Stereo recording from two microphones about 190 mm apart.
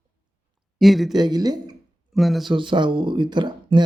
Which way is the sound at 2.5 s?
25° right (ahead or behind).